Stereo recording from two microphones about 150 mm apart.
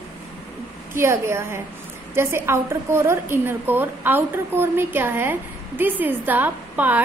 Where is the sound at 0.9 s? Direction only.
15° right (ahead or behind).